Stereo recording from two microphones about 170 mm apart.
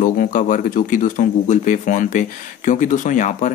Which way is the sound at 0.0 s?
50° left (ahead or behind).